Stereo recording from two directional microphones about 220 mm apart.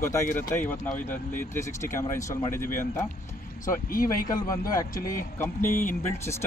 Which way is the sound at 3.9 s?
40° left (ahead or behind).